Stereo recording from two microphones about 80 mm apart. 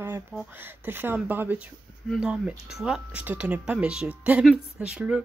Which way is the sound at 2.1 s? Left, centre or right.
Centre.